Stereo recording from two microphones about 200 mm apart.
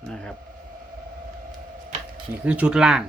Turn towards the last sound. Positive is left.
turn(degrees=-5)  # may be behind; listen again after turning